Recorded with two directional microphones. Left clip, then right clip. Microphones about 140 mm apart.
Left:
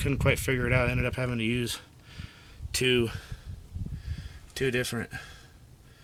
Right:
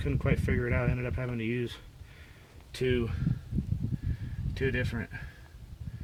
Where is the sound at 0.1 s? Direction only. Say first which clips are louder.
Left 5 dB; 50° left (ahead or behind).